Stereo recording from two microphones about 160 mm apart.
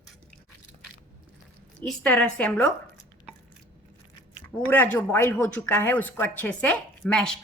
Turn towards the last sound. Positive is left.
turn(degrees=5)  # may be behind; listen again after turning